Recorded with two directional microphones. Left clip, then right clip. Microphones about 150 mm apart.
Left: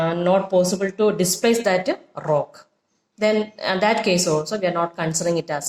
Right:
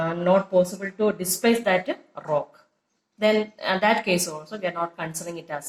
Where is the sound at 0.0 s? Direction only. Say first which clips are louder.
Left 2 dB; 40° left (ahead or behind).